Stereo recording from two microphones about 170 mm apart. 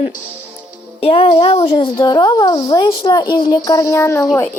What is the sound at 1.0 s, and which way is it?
Speech, 35° left (ahead or behind).